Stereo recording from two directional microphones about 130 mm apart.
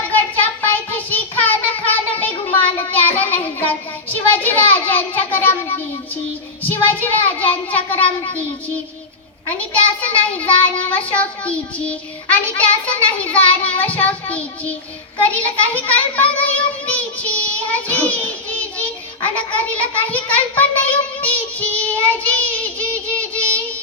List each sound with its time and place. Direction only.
0.1 s child singing: 15° left (ahead or behind)
19.5 s a child's voice: 40° left (ahead or behind)
20.0 s child singing: 10° left (ahead or behind)